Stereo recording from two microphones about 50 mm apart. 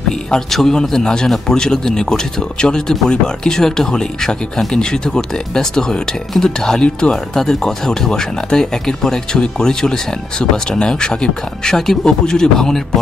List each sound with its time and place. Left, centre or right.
0.3 s speech: centre